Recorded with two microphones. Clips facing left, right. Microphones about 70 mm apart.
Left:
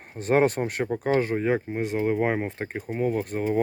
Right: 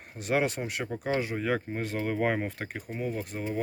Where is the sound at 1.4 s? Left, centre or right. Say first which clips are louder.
Left 5 dB; left.